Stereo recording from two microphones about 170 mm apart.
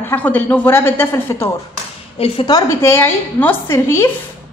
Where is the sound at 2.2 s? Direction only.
30° left (ahead or behind).